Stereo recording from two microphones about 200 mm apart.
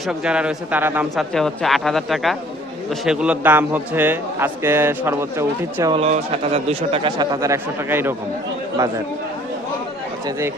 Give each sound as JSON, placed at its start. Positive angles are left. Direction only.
{"t": 0.1, "sound": "a man's voice", "side_deg": -5}
{"t": 1.1, "sound": "a man's voice", "side_deg": 0}
{"t": 5.9, "sound": "a man's voice", "side_deg": -30}